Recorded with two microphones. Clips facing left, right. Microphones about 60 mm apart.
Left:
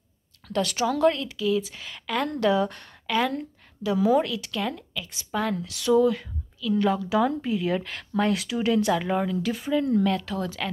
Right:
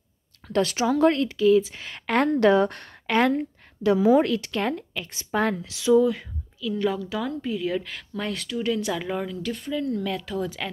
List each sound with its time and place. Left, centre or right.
0.5 s speech: right
1.1 s a woman's voice: right
5.6 s speech: centre
6.8 s speech: centre
7.2 s speech: centre
9.7 s speech: left
10.0 s speech: centre